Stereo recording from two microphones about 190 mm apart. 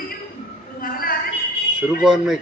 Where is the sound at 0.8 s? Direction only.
50° left (ahead or behind).